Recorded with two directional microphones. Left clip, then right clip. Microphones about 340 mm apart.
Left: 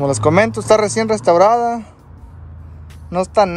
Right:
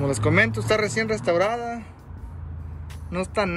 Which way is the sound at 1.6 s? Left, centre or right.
Left.